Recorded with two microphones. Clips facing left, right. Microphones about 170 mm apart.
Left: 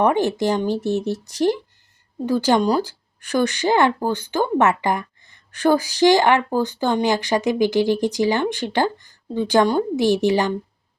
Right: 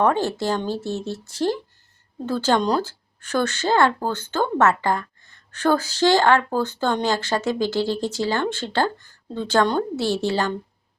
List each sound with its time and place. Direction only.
0.0 s a woman's voice: 15° left (ahead or behind)